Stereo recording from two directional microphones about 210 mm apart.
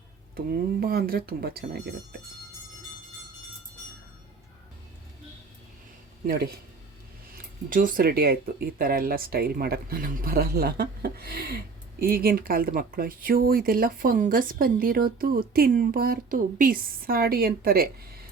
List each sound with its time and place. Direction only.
0.3 s speech: 45° right (ahead or behind)
6.2 s speech: 45° right (ahead or behind)
7.7 s speech: 40° right (ahead or behind)